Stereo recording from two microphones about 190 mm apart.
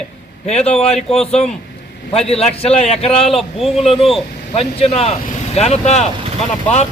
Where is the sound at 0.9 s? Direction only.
5° left (ahead or behind).